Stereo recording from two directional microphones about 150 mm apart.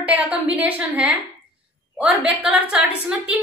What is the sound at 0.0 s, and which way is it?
A woman's voice, 10° right (ahead or behind).